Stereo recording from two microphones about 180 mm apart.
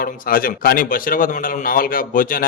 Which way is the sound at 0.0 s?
55° left (ahead or behind).